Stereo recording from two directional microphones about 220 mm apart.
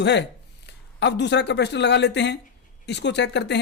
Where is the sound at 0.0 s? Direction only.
55° left (ahead or behind).